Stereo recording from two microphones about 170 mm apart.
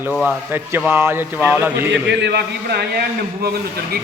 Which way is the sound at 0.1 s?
Centre (ahead or behind).